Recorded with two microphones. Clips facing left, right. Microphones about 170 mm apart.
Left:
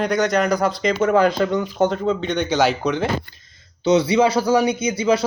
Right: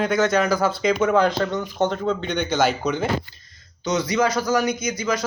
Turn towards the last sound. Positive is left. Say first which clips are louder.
# left 5 dB
turn(degrees=30)  # may be behind; listen again after turning